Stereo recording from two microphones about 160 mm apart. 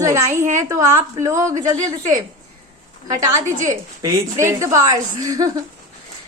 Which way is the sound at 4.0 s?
20° right (ahead or behind).